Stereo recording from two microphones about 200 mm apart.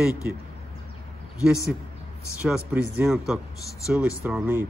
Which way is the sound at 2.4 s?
5° right (ahead or behind).